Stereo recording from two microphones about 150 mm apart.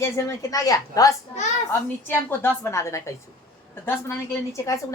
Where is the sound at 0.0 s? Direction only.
20° left (ahead or behind).